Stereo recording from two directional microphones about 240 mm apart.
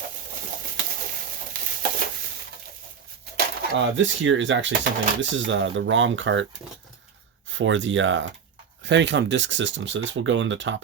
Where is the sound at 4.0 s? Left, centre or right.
Right.